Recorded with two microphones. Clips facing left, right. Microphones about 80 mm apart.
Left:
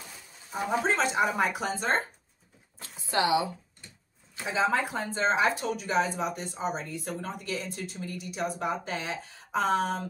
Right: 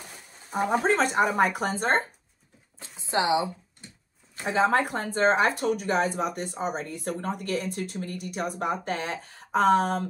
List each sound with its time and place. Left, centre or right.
0.5 s speech: right
3.0 s speech: right
4.5 s speech: right